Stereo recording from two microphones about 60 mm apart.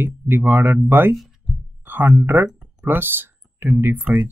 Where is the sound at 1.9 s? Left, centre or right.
Right.